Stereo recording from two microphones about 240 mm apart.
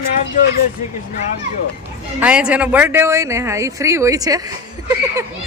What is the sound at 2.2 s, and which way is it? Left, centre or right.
Speech, centre.